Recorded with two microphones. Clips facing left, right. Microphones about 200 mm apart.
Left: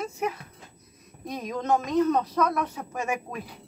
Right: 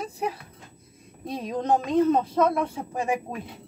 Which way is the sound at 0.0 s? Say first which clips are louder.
Even; 35° right (ahead or behind).